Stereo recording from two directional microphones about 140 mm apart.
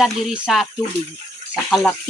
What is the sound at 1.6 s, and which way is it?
Speech, 5° left (ahead or behind).